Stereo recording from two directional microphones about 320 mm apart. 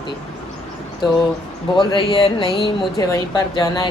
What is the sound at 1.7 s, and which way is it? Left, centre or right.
Speech, centre.